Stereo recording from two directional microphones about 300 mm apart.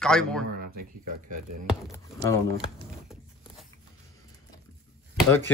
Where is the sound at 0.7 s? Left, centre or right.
Right.